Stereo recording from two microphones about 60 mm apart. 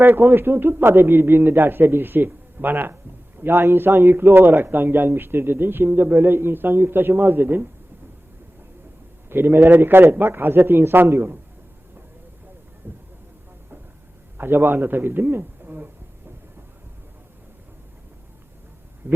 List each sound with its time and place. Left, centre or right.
0.0 s speech: right
9.3 s a man's voice: right
9.6 s a man's voice: right
10.1 s speech: right
12.8 s vehicle: right
14.3 s speech: right
19.0 s a sound: right